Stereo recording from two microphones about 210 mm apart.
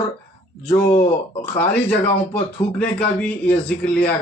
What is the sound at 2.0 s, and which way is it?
A man's voice, 10° left (ahead or behind).